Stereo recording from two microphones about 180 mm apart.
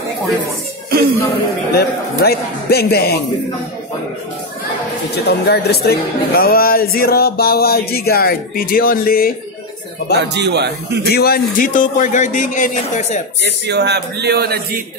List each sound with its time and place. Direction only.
1.7 s speech: 60° left (ahead or behind)
5.1 s speech: 65° left (ahead or behind)
10.1 s a man's voice: 70° right (ahead or behind)
11.1 s speech: 60° left (ahead or behind); by 13.2 s 45° left (ahead or behind)
13.4 s a man's voice: 70° right (ahead or behind)